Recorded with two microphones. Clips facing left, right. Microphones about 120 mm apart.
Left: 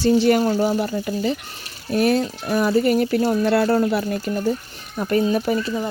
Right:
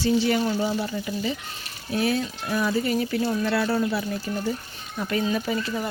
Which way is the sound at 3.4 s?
45° left (ahead or behind).